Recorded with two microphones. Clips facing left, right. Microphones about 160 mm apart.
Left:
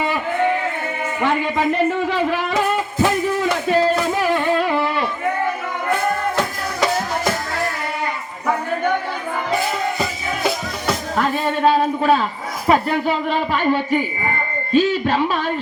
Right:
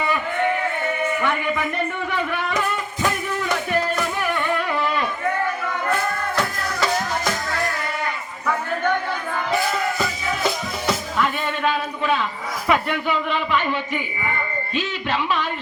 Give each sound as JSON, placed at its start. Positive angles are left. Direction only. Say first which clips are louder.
{"t": 1.2, "sound": "music", "louder": "left 4 dB", "side_deg": 30}
{"t": 11.1, "sound": "a man's voice", "louder": "left 4 dB", "side_deg": 40}